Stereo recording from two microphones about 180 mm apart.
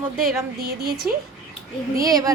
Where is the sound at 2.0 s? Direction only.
20° right (ahead or behind).